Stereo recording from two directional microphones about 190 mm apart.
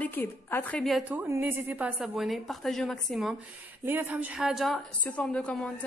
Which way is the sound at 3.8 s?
10° right (ahead or behind).